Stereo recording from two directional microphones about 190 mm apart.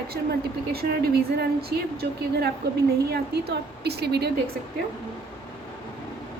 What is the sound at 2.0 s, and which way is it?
A woman's voice, 55° right (ahead or behind).